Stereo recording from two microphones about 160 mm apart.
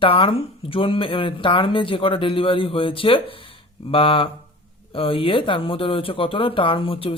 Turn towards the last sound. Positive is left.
turn(degrees=35)  # may be behind; listen again after turning